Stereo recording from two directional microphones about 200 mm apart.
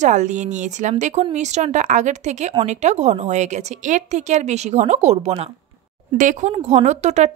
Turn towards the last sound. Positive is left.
turn(degrees=-35)  # may be behind; listen again after turning